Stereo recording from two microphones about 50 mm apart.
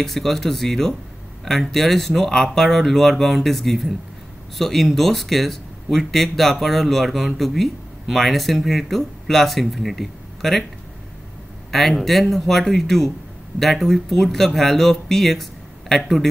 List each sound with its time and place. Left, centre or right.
0.0 s speech: centre
11.7 s speech: centre